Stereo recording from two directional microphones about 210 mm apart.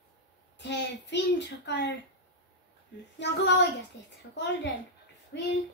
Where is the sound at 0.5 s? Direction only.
55° left (ahead or behind).